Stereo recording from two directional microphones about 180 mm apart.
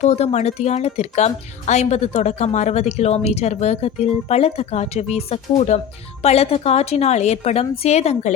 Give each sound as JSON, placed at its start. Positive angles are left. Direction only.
{"t": 0.0, "sound": "speech", "side_deg": 40}